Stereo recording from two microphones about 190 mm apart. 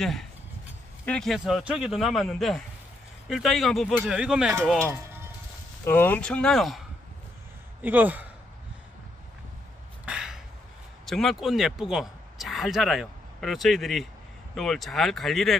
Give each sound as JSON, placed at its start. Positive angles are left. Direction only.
{"t": 0.0, "sound": "a man's voice", "side_deg": 0}
{"t": 4.8, "sound": "music", "side_deg": -15}
{"t": 5.9, "sound": "a man's voice", "side_deg": 10}
{"t": 7.8, "sound": "speech", "side_deg": -10}
{"t": 10.0, "sound": "a sound", "side_deg": -5}
{"t": 11.1, "sound": "a man's voice", "side_deg": 0}